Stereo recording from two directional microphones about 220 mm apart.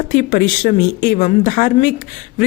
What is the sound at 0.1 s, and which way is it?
A woman's voice, 35° left (ahead or behind).